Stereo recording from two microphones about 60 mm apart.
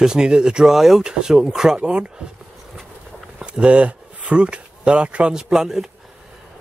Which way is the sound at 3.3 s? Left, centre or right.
Centre.